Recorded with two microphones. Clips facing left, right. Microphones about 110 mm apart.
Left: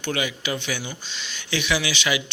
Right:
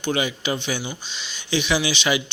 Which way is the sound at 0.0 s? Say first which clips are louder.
Right 3 dB; 25° right (ahead or behind).